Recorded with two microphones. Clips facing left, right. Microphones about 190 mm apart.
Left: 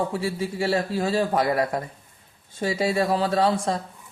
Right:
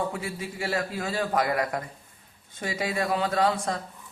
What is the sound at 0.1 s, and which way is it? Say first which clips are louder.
A man's voice: left 7 dB; 30° left (ahead or behind).